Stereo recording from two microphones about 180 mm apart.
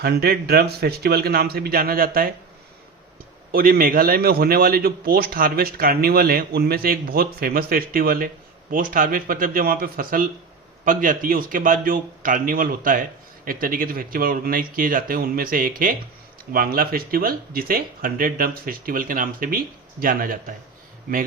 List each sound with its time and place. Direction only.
0.0 s a man's voice: 60° right (ahead or behind)
3.5 s a man's voice: 55° right (ahead or behind)